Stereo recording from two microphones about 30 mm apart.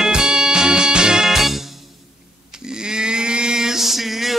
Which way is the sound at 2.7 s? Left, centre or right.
Right.